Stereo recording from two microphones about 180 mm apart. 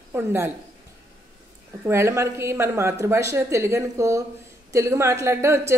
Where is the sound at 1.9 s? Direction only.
15° right (ahead or behind).